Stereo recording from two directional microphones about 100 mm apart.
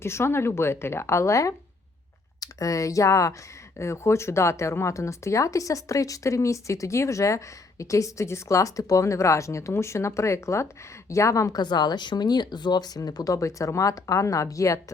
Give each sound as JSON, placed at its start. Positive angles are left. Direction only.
{"t": 0.0, "sound": "a woman's voice", "side_deg": 25}